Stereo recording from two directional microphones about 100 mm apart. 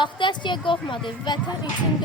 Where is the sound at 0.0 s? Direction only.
50° left (ahead or behind).